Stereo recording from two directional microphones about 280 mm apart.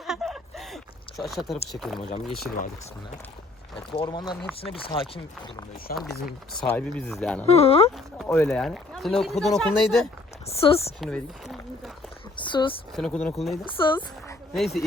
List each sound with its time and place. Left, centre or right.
0.0 s a sound: centre
1.7 s speech: centre
3.9 s speech: centre
5.9 s speech: left
6.2 s speech: centre
7.4 s speech: left
7.9 s speech: centre
10.4 s speech: left
11.0 s a sound: centre
12.4 s a sound: centre
13.0 s speech: centre
13.7 s a woman's voice: centre
14.5 s speech: centre